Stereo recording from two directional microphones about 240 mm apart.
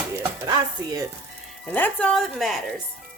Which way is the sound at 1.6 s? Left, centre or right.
Centre.